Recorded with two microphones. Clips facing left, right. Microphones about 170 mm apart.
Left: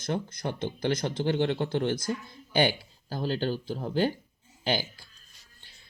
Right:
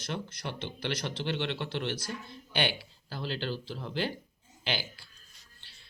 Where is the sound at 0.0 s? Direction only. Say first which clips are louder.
Left 6 dB; 45° left (ahead or behind).